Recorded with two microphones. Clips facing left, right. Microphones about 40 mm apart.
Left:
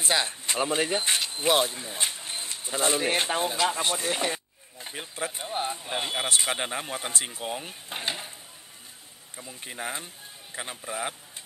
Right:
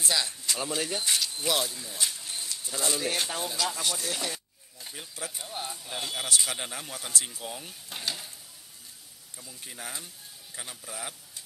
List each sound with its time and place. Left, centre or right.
0.0 s speech: left
9.4 s speech: left